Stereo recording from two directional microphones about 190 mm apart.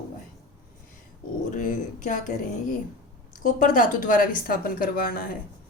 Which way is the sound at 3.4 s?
45° left (ahead or behind).